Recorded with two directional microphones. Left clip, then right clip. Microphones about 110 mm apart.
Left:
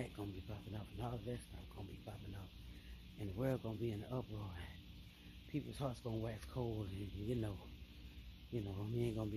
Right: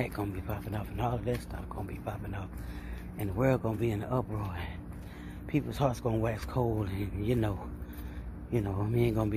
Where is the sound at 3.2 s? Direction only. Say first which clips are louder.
Right 13 dB; 25° left (ahead or behind).